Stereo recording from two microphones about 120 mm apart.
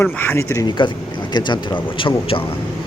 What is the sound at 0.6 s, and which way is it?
Speech, 40° left (ahead or behind).